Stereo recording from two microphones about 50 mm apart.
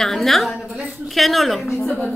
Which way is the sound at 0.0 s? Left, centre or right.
Centre.